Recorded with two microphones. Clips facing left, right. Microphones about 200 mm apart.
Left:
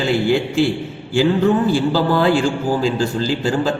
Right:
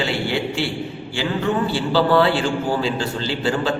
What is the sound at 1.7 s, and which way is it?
A man's voice, 45° left (ahead or behind).